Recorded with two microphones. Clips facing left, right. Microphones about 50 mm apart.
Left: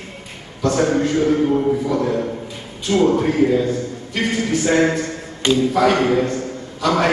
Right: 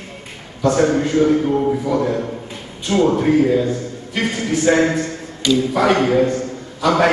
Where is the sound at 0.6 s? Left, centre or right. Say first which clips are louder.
Right 2 dB; centre.